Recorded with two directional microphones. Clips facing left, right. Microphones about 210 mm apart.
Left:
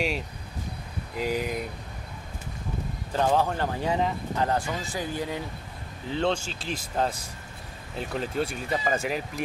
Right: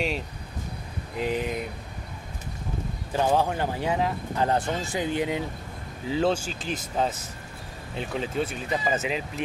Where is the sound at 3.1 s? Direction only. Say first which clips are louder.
Right 1 dB; 10° right (ahead or behind).